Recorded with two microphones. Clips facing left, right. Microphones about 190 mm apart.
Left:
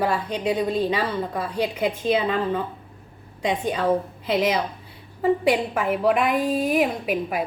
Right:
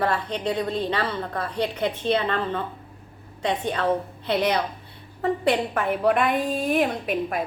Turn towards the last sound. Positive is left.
turn(degrees=5)  # may be behind; listen again after turning